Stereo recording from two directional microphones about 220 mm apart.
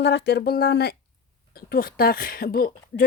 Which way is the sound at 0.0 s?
50° left (ahead or behind).